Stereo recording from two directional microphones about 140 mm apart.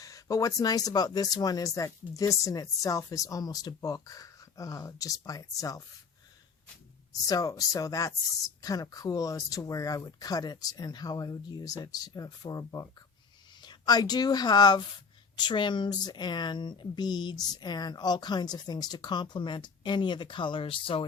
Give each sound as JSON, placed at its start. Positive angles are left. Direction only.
{"t": 0.0, "sound": "speech", "side_deg": 25}
{"t": 7.1, "sound": "speech", "side_deg": 25}